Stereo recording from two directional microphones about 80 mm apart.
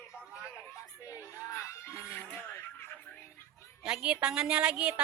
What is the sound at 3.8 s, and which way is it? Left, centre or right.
A woman's voice, centre.